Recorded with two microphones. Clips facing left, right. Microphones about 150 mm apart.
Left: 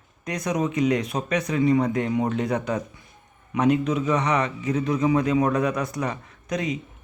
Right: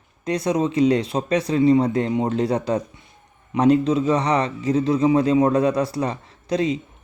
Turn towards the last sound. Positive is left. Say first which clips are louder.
# right 6 dB
turn(degrees=-30)  # may be behind; listen again after turning